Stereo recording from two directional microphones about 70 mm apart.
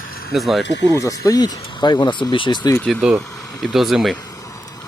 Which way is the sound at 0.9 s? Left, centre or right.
Left.